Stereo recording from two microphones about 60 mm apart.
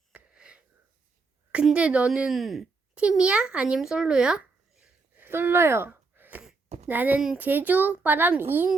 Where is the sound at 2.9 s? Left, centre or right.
Centre.